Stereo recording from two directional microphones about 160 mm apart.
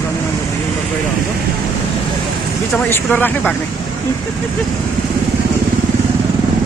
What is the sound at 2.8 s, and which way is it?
Speech, 10° left (ahead or behind).